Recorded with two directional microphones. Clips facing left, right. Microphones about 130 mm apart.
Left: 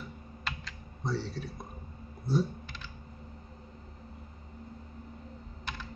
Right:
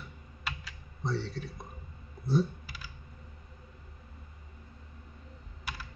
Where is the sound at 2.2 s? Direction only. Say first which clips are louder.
Right 1 dB; 5° right (ahead or behind).